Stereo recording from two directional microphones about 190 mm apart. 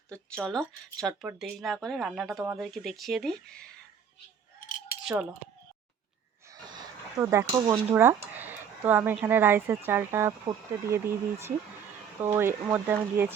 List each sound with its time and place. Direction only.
0.1 s speech: 5° left (ahead or behind)
6.5 s a sound: 20° right (ahead or behind)
7.9 s speech: 10° right (ahead or behind)